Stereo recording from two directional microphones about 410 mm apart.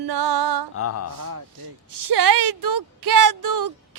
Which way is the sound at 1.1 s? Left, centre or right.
Right.